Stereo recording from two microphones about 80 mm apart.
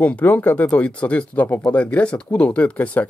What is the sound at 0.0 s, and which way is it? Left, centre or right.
Speech, left.